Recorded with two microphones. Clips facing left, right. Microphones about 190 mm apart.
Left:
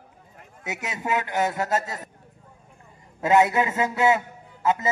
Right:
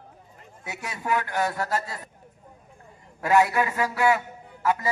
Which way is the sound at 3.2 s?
20° left (ahead or behind).